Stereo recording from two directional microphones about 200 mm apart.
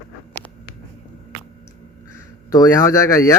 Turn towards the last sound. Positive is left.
turn(degrees=15)  # may be behind; listen again after turning